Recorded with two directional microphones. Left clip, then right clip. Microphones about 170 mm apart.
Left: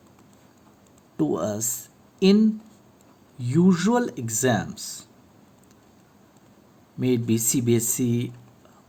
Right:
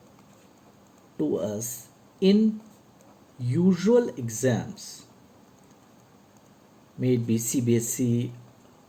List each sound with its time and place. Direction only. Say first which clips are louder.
1.1 s speech: left 2 dB; 65° left (ahead or behind)
3.4 s speech: left 2 dB; 70° left (ahead or behind)
7.0 s speech: left 2 dB; 65° left (ahead or behind)